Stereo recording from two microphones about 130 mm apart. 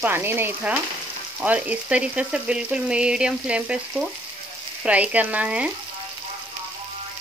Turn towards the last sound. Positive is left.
turn(degrees=-10)  # may be behind; listen again after turning